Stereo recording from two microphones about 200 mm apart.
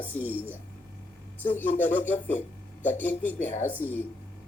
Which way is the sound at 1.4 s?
10° left (ahead or behind).